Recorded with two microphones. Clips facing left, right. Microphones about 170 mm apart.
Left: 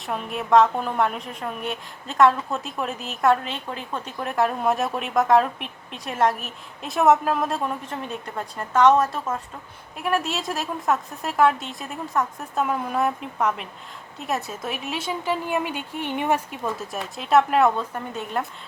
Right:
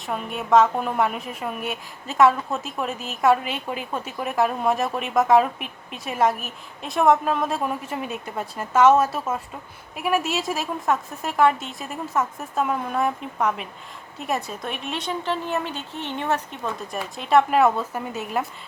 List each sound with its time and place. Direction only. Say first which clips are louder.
0.0 s a woman's voice: even; centre (ahead or behind)